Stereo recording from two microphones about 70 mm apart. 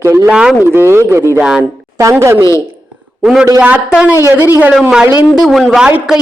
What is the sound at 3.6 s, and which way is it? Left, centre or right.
A man's voice, centre.